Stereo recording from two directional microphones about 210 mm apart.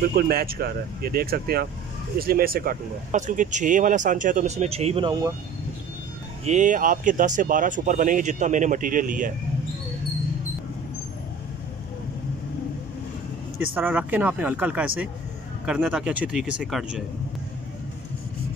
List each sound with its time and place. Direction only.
0.1 s speech: 45° right (ahead or behind); by 5.3 s 20° right (ahead or behind)
6.4 s speech: 35° right (ahead or behind)
13.7 s speech: 10° right (ahead or behind)